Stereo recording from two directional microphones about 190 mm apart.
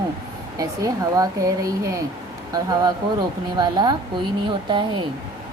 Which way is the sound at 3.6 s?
20° right (ahead or behind).